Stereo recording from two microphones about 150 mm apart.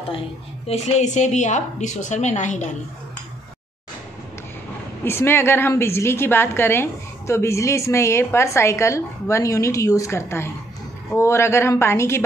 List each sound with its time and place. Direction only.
0.7 s a woman's voice: 50° left (ahead or behind)
5.0 s a woman's voice: 15° left (ahead or behind)